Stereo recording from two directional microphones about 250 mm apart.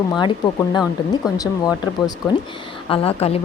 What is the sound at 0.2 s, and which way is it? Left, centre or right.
A woman's voice, centre.